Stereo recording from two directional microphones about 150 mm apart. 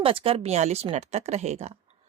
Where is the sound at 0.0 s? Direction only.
35° right (ahead or behind).